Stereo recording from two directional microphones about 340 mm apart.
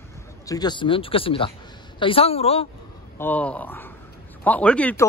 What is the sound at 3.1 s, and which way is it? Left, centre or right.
A man's voice, centre.